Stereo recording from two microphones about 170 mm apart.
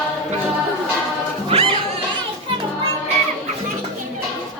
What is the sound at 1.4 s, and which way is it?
Music, 35° right (ahead or behind).